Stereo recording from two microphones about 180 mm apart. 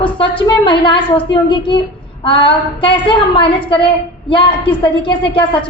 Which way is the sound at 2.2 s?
30° left (ahead or behind).